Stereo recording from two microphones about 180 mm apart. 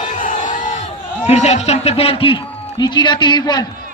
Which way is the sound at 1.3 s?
40° left (ahead or behind).